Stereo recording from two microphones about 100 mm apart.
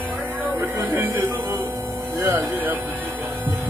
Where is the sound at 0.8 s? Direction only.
30° right (ahead or behind).